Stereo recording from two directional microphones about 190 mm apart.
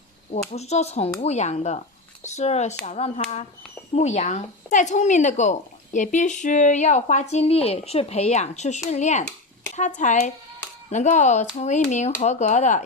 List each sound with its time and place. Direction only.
0.5 s speech: 35° left (ahead or behind)